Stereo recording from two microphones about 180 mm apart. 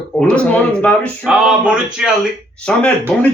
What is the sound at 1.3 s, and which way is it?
Speech, 5° right (ahead or behind).